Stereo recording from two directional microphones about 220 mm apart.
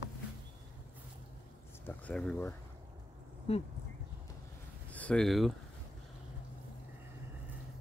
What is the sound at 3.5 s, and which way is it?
Speech, 25° left (ahead or behind).